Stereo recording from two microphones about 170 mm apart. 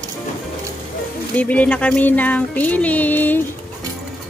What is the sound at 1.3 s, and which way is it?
Speech, 10° left (ahead or behind).